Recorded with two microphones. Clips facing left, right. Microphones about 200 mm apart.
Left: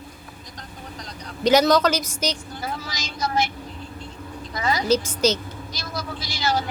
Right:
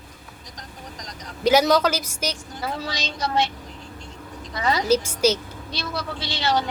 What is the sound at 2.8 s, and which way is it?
Speech, 35° right (ahead or behind).